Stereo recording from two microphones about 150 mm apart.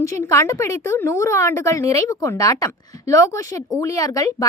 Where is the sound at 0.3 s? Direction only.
20° left (ahead or behind).